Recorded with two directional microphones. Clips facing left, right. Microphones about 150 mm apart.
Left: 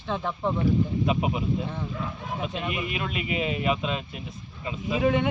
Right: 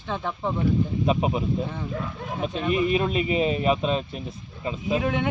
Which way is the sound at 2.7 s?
35° right (ahead or behind).